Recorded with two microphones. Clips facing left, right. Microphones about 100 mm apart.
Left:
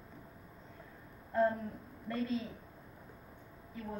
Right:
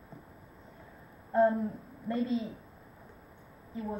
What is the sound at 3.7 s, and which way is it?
Speech, 20° right (ahead or behind).